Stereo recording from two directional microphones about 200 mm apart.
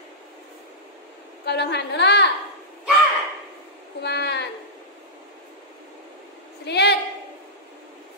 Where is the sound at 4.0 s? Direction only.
55° left (ahead or behind).